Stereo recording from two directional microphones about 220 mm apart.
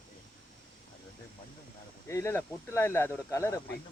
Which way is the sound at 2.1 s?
15° left (ahead or behind).